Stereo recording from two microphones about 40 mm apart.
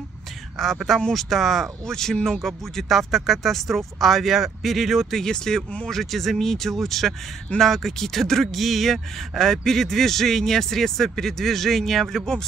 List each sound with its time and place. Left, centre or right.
0.6 s speech: centre
5.2 s speech: centre
5.9 s speech: centre